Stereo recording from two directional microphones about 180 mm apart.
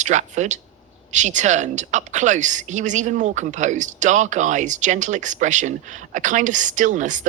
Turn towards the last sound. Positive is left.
turn(degrees=-45)  # may be behind; listen again after turning